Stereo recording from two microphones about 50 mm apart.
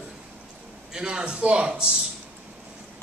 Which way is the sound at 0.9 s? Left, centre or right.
Centre.